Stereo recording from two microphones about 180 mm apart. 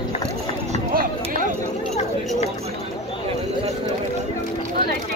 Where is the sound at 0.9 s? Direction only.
55° right (ahead or behind).